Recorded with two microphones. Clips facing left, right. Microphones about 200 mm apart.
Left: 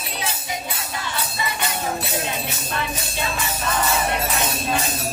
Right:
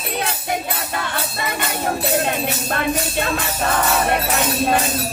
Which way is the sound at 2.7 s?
55° right (ahead or behind).